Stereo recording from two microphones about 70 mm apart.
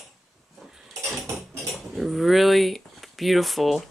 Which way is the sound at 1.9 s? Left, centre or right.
Centre.